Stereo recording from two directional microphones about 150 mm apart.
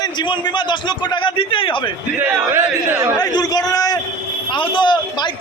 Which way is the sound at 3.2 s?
25° left (ahead or behind).